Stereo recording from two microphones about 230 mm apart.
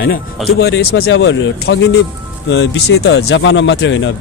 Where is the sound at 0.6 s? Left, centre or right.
Left.